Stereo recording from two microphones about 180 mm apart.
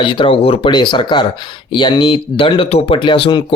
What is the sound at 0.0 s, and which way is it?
Speech, 25° left (ahead or behind).